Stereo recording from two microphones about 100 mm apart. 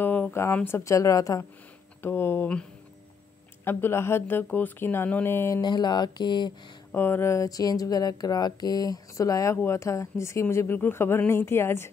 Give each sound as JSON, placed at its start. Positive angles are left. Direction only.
{"t": 0.0, "sound": "a sound", "side_deg": 20}
{"t": 0.7, "sound": "speech", "side_deg": 25}
{"t": 2.0, "sound": "speech", "side_deg": 20}
{"t": 3.6, "sound": "speech", "side_deg": 25}
{"t": 5.6, "sound": "mantra", "side_deg": 45}
{"t": 6.9, "sound": "speech", "side_deg": 20}